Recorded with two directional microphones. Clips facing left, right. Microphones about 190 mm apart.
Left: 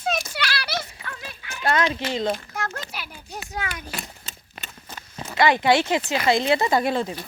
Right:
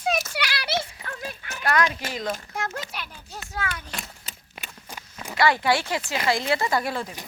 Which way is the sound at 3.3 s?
15° left (ahead or behind).